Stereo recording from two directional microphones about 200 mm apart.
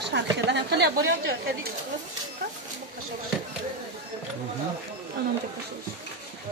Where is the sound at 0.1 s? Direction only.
60° right (ahead or behind).